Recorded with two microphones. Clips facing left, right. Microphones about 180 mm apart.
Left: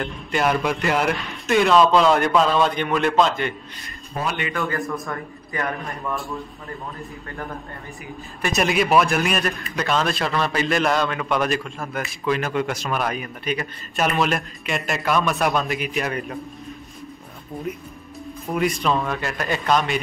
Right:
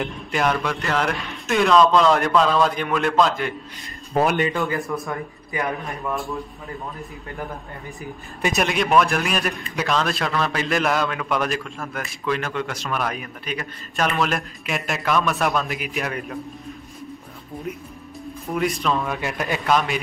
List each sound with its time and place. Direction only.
0.0 s a man's voice: 5° right (ahead or behind)
0.5 s a man's voice: 10° left (ahead or behind)
4.1 s a man's voice: 55° right (ahead or behind)
4.6 s a man's voice: 20° right (ahead or behind)
5.9 s a man's voice: centre (ahead or behind)
8.5 s a man's voice: 5° left (ahead or behind)
17.7 s a man's voice: centre (ahead or behind)
19.1 s a man's voice: 15° right (ahead or behind)